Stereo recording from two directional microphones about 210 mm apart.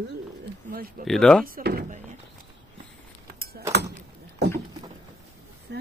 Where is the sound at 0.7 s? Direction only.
45° right (ahead or behind).